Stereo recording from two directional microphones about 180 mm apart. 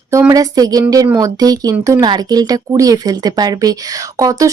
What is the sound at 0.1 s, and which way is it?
Speech, 15° right (ahead or behind).